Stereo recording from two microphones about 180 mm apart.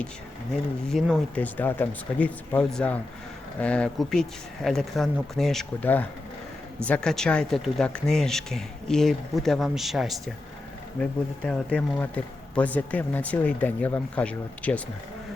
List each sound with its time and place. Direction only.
0.9 s speech: centre (ahead or behind)